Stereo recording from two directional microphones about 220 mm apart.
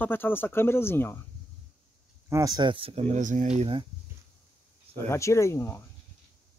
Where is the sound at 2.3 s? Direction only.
15° right (ahead or behind).